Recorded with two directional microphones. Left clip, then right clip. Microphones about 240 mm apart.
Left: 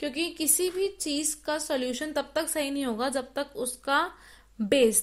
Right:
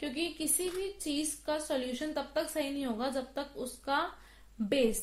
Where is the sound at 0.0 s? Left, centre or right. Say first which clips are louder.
Left 5 dB; left.